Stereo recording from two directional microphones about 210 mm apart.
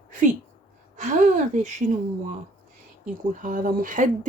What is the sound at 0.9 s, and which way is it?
Speech, 35° right (ahead or behind).